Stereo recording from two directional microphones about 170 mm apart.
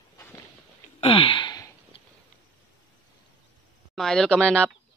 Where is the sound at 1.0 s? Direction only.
30° left (ahead or behind).